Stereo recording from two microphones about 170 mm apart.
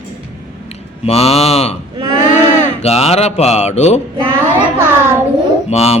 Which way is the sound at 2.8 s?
40° left (ahead or behind).